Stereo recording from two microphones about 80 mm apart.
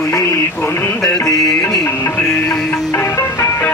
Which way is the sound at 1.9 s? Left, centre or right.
Left.